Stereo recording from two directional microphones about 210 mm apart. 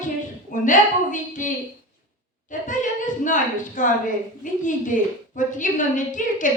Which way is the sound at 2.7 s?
35° left (ahead or behind).